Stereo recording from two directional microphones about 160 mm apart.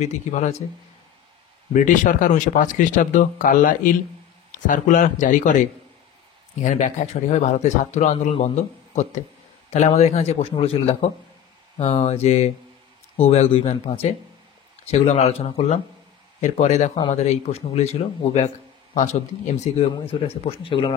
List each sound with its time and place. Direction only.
0.0 s speech: 45° left (ahead or behind)
1.7 s speech: 55° left (ahead or behind); by 20.9 s 35° left (ahead or behind)